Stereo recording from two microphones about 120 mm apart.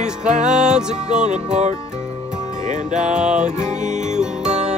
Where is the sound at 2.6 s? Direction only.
90° right.